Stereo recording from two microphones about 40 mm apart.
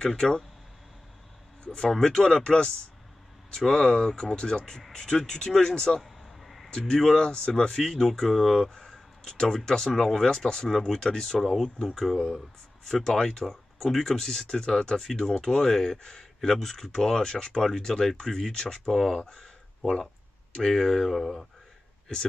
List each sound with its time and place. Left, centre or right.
0.0 s speech: centre
1.9 s speech: centre
6.0 s a sound: centre
6.7 s speech: centre
8.6 s speech: centre
20.5 s speech: centre